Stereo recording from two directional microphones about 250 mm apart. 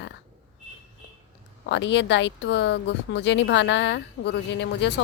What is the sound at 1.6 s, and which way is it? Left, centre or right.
Speech, left.